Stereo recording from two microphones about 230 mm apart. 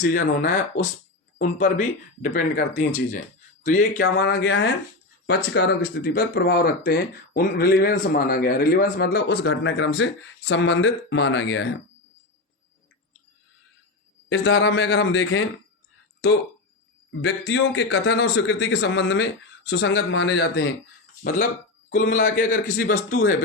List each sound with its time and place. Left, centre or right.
0.0 s speech: left
4.0 s speech: left
14.3 s speech: left
17.1 s speech: left
21.8 s speech: left